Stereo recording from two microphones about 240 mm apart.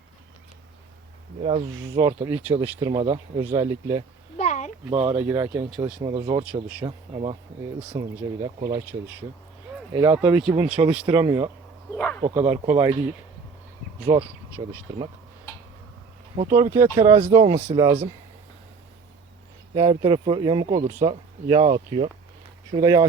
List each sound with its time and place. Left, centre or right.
1.4 s speech: right
4.4 s a sound: left
4.9 s speech: right
5.3 s speech: centre
6.4 s speech: centre
6.8 s speech: right
8.7 s speech: centre
11.3 s speech: right
11.9 s speech: centre
12.2 s speech: right
14.1 s speech: centre
16.5 s speech: centre
19.7 s speech: right